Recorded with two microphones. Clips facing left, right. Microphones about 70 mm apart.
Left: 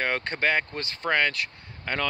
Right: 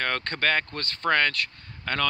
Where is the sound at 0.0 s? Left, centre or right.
Centre.